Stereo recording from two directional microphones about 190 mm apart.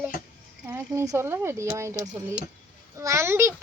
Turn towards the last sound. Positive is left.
turn(degrees=-15)  # may be behind; listen again after turning